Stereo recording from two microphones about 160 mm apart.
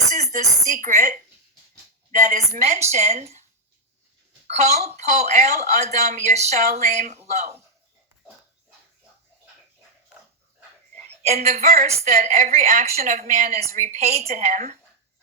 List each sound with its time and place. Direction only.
0.1 s a sound: 45° right (ahead or behind)
2.1 s a woman's voice: 50° right (ahead or behind)
4.4 s a woman's voice: 45° right (ahead or behind)
11.4 s a woman's voice: 40° right (ahead or behind)
12.8 s a woman's voice: 45° right (ahead or behind)